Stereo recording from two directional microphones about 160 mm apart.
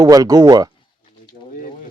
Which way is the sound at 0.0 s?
20° right (ahead or behind).